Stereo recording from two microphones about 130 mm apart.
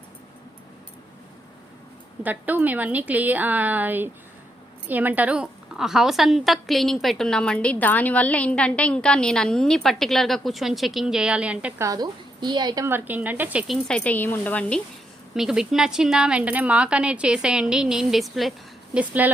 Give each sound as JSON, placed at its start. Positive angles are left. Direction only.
{"t": 2.2, "sound": "a woman's voice", "side_deg": -15}
{"t": 11.8, "sound": "a woman's voice", "side_deg": -30}
{"t": 12.8, "sound": "a woman's voice", "side_deg": -15}
{"t": 13.8, "sound": "speech", "side_deg": 5}
{"t": 15.4, "sound": "a woman's voice", "side_deg": -5}
{"t": 18.9, "sound": "a woman's voice", "side_deg": -10}